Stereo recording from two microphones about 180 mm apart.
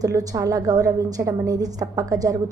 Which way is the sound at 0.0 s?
20° right (ahead or behind).